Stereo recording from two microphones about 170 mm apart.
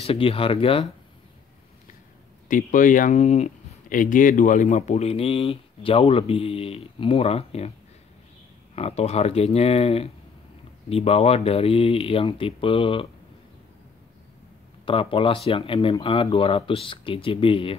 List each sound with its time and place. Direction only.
0.0 s speech: 35° left (ahead or behind)
2.4 s speech: 50° left (ahead or behind)
8.7 s speech: 40° left (ahead or behind)
14.9 s speech: 30° left (ahead or behind)